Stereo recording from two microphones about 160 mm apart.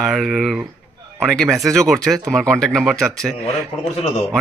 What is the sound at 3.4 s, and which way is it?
Speech, 40° left (ahead or behind).